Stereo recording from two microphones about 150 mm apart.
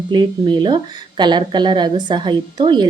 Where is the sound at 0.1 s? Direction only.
30° right (ahead or behind).